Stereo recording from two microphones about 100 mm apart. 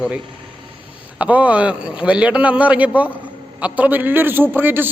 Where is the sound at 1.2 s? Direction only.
15° right (ahead or behind).